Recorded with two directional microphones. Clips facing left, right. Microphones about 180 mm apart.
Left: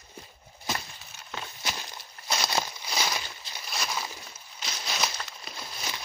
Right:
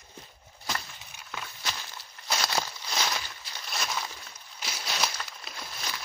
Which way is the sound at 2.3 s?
10° left (ahead or behind).